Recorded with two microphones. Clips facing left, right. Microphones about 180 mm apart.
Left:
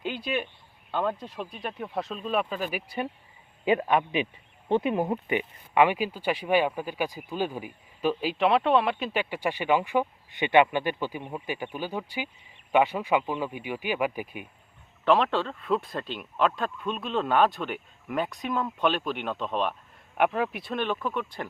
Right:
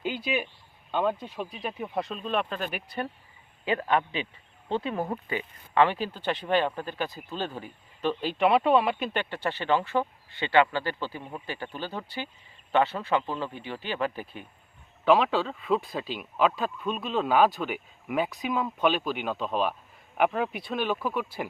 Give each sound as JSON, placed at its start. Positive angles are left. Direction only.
{"t": 0.0, "sound": "speech", "side_deg": -5}
{"t": 9.3, "sound": "speech", "side_deg": 10}
{"t": 15.0, "sound": "speech", "side_deg": 0}